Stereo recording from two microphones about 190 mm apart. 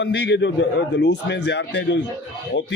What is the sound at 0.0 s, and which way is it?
Speech, 65° left (ahead or behind).